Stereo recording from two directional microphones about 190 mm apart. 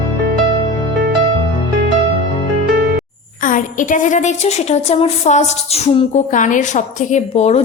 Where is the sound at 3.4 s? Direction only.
45° left (ahead or behind).